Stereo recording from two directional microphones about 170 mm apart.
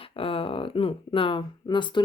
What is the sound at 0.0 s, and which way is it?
Speech, 30° left (ahead or behind).